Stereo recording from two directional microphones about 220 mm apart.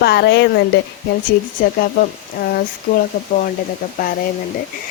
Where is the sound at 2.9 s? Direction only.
55° left (ahead or behind).